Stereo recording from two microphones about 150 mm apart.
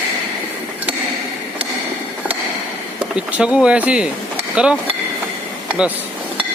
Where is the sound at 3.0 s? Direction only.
5° right (ahead or behind).